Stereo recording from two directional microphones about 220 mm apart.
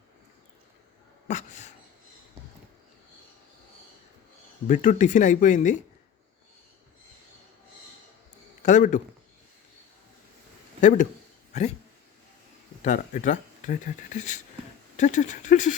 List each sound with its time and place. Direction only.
1.3 s a sound: 35° left (ahead or behind)
4.7 s speech: 35° left (ahead or behind)
8.6 s speech: 35° left (ahead or behind)
10.8 s speech: 35° left (ahead or behind)
12.8 s speech: 35° left (ahead or behind)